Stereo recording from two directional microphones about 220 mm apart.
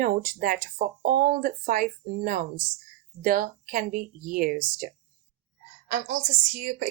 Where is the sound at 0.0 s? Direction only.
40° right (ahead or behind).